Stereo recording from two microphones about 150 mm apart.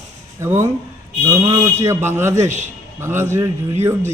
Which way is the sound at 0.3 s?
15° right (ahead or behind).